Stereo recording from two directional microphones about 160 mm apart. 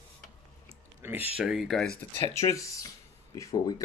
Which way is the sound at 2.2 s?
20° left (ahead or behind).